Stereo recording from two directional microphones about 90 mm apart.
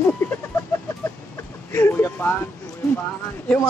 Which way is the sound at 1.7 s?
25° left (ahead or behind).